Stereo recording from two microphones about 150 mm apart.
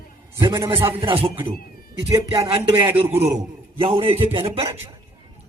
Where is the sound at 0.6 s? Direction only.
35° right (ahead or behind).